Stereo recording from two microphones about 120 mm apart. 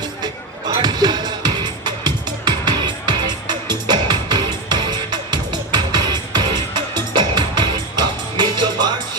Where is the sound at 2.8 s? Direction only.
40° right (ahead or behind).